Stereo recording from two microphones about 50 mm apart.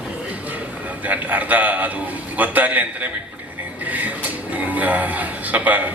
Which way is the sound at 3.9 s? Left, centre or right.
Right.